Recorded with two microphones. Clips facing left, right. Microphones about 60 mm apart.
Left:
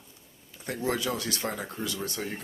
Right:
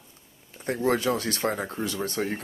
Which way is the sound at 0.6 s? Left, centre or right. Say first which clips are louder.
Right 5 dB; right.